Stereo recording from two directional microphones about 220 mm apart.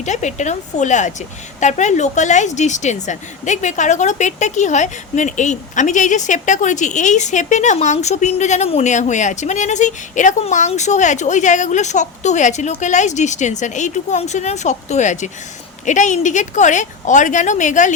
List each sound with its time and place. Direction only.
0.0 s a woman's voice: 35° left (ahead or behind)